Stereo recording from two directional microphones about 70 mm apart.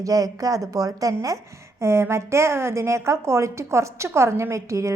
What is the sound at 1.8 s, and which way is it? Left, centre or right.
A woman's voice, right.